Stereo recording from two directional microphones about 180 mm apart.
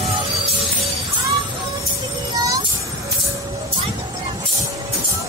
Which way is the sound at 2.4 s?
20° right (ahead or behind).